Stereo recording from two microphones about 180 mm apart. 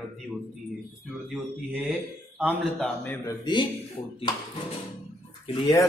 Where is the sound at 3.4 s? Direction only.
25° left (ahead or behind).